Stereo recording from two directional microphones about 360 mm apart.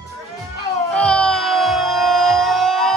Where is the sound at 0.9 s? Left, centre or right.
Centre.